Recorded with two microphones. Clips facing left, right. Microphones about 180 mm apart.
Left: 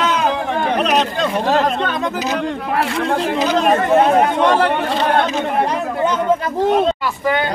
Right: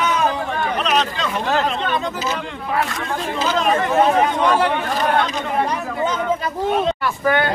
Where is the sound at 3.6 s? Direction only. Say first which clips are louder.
Left 3 dB; 45° left (ahead or behind).